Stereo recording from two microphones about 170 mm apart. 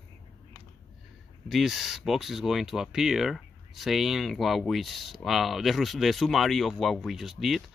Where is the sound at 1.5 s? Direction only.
Centre (ahead or behind).